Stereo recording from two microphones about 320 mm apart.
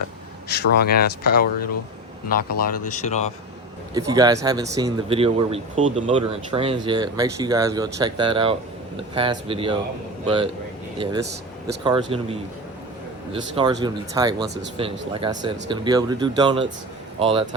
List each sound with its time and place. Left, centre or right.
0.6 s speech: left
2.8 s speech: left
3.9 s speech: centre
11.8 s speech: centre